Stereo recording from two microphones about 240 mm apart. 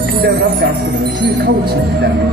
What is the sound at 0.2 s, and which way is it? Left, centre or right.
Speech, right.